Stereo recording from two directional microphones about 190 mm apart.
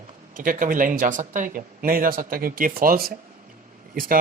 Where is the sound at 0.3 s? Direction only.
45° right (ahead or behind).